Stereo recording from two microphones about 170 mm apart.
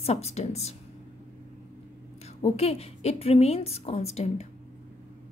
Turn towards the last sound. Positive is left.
turn(degrees=40)  # may be behind; listen again after turning